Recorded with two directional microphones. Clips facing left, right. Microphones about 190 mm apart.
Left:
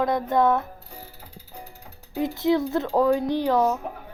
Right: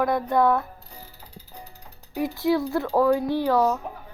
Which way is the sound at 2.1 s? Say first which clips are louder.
Left 1 dB; 20° left (ahead or behind).